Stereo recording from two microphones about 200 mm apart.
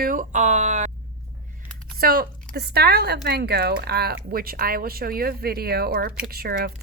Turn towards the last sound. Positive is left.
turn(degrees=-50)  # may be behind; listen again after turning